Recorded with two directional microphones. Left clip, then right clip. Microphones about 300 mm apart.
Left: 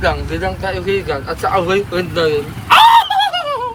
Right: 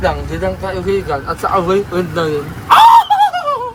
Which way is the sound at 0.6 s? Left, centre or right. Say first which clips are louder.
Right 1 dB; centre.